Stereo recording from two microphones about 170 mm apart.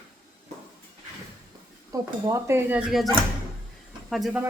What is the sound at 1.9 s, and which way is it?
Speech, 20° right (ahead or behind).